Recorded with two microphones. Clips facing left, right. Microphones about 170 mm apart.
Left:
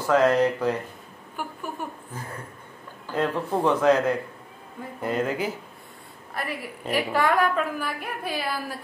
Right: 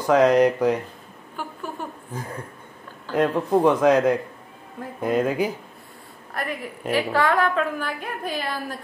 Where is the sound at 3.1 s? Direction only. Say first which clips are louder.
Right 5 dB; 15° right (ahead or behind).